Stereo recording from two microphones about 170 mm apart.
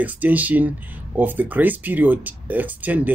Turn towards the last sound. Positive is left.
turn(degrees=-10)  # may be behind; listen again after turning